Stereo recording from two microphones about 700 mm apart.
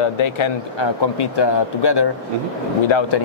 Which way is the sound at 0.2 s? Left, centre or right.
Left.